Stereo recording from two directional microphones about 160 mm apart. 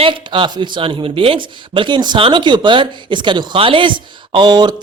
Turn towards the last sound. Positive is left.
turn(degrees=-25)  # may be behind; listen again after turning